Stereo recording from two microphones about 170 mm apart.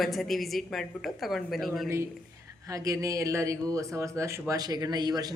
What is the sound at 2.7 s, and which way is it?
A man's voice, 20° right (ahead or behind).